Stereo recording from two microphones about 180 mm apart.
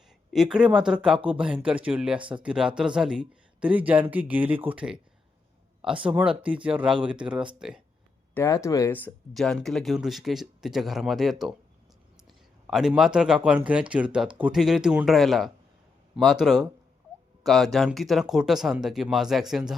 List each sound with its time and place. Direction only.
0.3 s speech: 5° right (ahead or behind)
6.1 s speech: 5° right (ahead or behind)
8.4 s speech: 15° left (ahead or behind); by 11.5 s centre (ahead or behind)
12.6 s speech: 5° right (ahead or behind)